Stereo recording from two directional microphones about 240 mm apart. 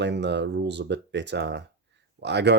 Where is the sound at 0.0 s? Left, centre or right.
Right.